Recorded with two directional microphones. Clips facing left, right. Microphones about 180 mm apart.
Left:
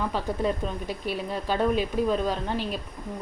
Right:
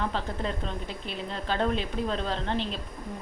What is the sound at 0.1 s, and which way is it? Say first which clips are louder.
A woman's voice: left 5 dB; 10° left (ahead or behind).